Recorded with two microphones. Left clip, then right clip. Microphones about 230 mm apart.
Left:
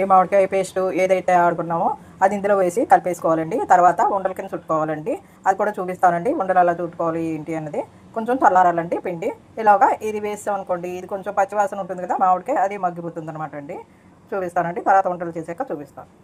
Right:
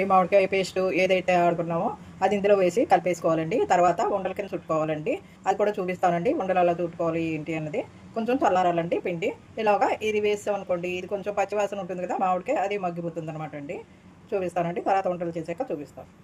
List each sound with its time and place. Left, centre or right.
0.0 s speech: centre
7.2 s speech: left
7.8 s speech: centre
14.3 s speech: centre